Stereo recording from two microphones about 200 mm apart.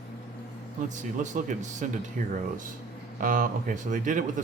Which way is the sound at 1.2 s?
40° right (ahead or behind).